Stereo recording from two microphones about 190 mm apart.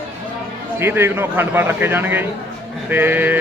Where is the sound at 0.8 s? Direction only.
10° right (ahead or behind).